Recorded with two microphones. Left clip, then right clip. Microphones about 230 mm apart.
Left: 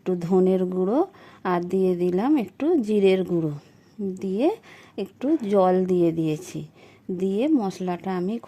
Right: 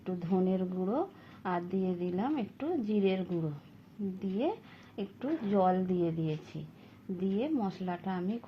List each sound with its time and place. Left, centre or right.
0.0 s a woman's voice: left